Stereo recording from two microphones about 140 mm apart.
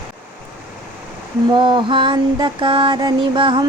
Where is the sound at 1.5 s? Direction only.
35° right (ahead or behind).